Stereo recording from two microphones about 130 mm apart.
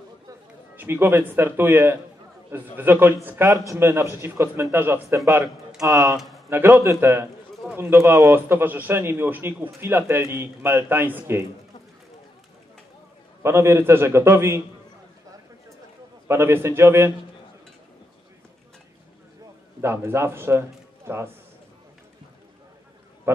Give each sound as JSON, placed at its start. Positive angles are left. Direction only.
{"t": 0.7, "sound": "a man's voice", "side_deg": -15}
{"t": 6.1, "sound": "a sound", "side_deg": 0}
{"t": 6.5, "sound": "a man's voice", "side_deg": -15}
{"t": 13.4, "sound": "a man's voice", "side_deg": -20}
{"t": 16.3, "sound": "a man's voice", "side_deg": -20}
{"t": 19.8, "sound": "a man's voice", "side_deg": -20}
{"t": 23.3, "sound": "a man's voice", "side_deg": -20}